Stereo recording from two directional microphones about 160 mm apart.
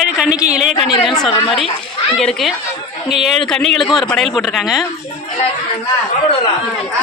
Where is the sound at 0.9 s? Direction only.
30° left (ahead or behind).